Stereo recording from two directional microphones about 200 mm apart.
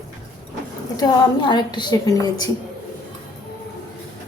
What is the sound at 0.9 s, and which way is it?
A woman's voice, 20° left (ahead or behind).